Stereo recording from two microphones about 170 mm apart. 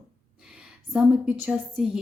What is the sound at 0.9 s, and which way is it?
Speech, 5° right (ahead or behind).